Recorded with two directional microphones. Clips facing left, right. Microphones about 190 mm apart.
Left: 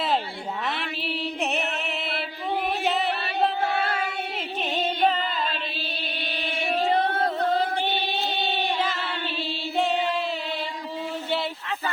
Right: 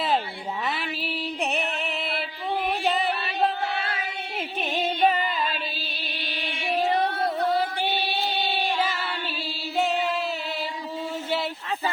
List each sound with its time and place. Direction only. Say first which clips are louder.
0.6 s music: right 1 dB; centre (ahead or behind)
2.8 s chant: even; centre (ahead or behind)
3.6 s a sound: left 4 dB; 45° left (ahead or behind)
4.4 s music: right 2 dB; 10° right (ahead or behind)
7.2 s music: even; 10° right (ahead or behind)
9.7 s chant: even; centre (ahead or behind)